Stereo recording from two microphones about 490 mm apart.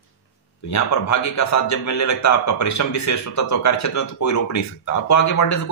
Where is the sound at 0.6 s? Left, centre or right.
Left.